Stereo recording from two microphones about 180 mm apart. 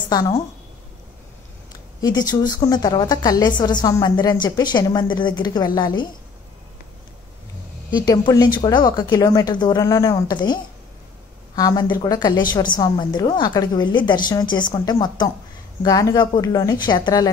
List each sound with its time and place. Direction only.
0.1 s a woman's voice: 20° left (ahead or behind)
2.0 s a woman's voice: 20° left (ahead or behind)
7.9 s a woman's voice: 20° left (ahead or behind)